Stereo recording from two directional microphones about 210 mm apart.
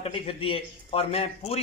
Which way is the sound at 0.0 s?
25° left (ahead or behind).